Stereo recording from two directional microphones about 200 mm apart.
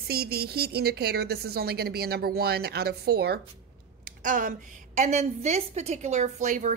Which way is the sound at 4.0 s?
40° right (ahead or behind).